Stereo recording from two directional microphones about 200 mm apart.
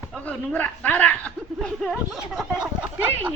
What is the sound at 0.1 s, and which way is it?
Speech, 5° left (ahead or behind).